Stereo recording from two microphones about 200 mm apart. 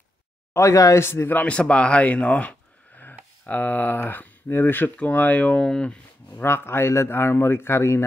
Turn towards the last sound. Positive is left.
turn(degrees=15)  # may be behind; listen again after turning